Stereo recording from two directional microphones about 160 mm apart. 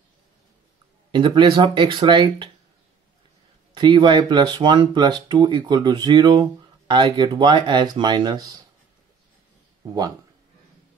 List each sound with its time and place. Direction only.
1.1 s speech: 30° right (ahead or behind)
3.7 s speech: 30° right (ahead or behind)